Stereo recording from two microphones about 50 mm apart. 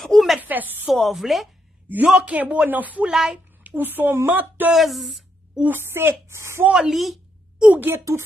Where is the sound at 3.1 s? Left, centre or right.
Centre.